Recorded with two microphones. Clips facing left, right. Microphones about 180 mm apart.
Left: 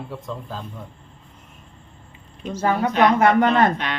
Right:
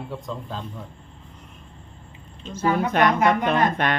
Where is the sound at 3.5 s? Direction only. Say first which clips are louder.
Left 2 dB; 55° right (ahead or behind).